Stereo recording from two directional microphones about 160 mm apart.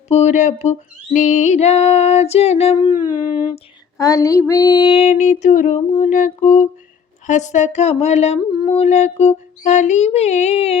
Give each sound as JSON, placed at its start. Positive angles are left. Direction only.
{"t": 0.1, "sound": "female singing", "side_deg": 45}
{"t": 2.7, "sound": "a sound", "side_deg": 25}
{"t": 3.9, "sound": "female singing", "side_deg": 20}